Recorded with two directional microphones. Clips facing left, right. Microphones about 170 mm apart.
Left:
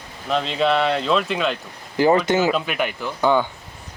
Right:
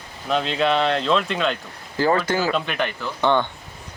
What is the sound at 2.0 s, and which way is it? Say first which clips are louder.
Speech: left 4 dB; 20° left (ahead or behind).